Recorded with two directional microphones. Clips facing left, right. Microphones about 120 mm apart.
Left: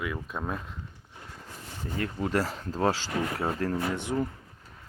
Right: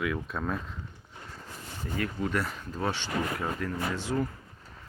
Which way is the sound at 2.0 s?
30° left (ahead or behind).